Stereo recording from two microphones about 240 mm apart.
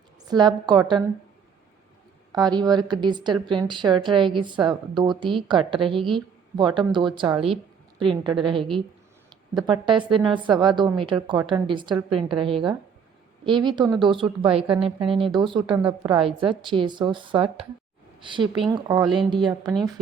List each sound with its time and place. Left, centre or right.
0.3 s speech: centre
2.3 s a woman's voice: centre
19.5 s speech: centre